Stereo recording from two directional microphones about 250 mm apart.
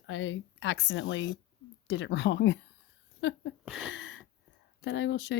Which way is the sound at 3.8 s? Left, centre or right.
Left.